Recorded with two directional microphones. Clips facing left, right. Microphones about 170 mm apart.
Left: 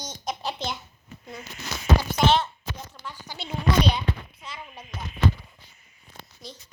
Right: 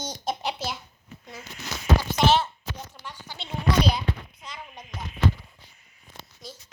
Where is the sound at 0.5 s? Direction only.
5° right (ahead or behind).